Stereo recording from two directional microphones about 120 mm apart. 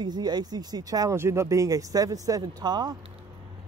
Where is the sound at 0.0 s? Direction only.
35° right (ahead or behind).